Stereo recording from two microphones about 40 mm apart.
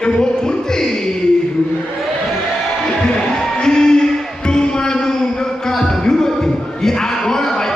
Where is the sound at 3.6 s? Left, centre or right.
Centre.